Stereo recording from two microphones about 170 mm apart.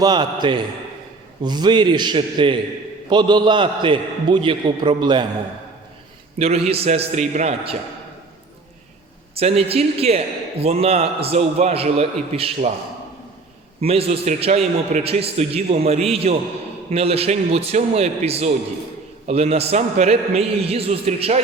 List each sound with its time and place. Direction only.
0.0 s a man's voice: 25° right (ahead or behind)
6.4 s a man's voice: 35° right (ahead or behind)
9.3 s a man's voice: 35° right (ahead or behind)
13.8 s a man's voice: 35° right (ahead or behind)